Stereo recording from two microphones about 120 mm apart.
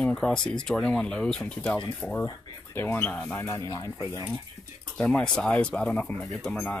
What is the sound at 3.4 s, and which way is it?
Speech, 25° left (ahead or behind).